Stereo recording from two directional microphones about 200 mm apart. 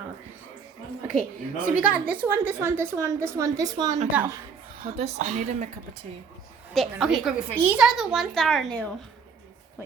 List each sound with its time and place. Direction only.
1.7 s a woman's voice: 10° right (ahead or behind)
4.8 s speech: 30° right (ahead or behind)
6.7 s a woman's voice: centre (ahead or behind)